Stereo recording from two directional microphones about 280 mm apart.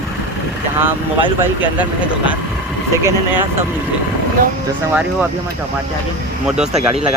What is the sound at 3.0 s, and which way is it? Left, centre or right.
Speech, centre.